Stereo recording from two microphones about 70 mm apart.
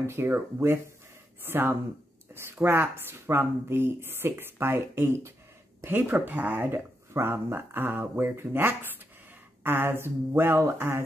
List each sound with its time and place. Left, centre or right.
0.0 s speech: right
6.7 s speech: right